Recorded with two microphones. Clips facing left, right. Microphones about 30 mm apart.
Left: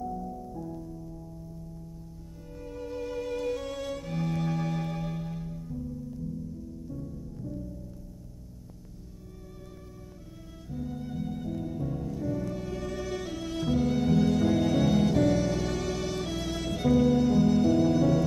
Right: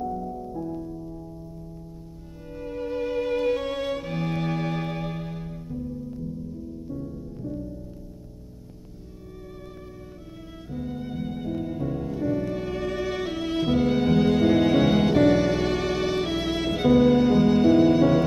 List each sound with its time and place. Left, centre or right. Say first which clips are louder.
0.0 s music: right 5 dB; right
2.6 s music: right 7 dB; right
6.9 s music: right 6 dB; right
10.7 s music: right 4 dB; right